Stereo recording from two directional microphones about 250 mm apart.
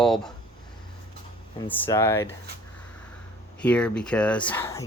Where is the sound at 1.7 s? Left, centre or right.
Centre.